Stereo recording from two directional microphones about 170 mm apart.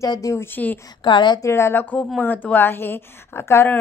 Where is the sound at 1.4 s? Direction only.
15° left (ahead or behind).